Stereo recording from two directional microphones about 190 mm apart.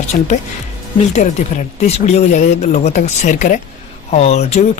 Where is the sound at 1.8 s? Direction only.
35° left (ahead or behind).